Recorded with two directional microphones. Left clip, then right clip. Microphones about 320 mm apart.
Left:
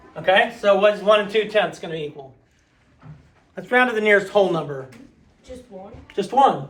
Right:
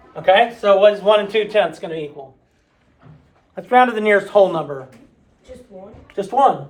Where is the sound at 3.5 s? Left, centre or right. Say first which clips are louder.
Right 4 dB; right.